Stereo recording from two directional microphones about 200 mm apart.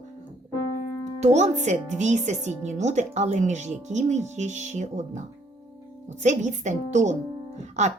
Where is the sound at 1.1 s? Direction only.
35° right (ahead or behind).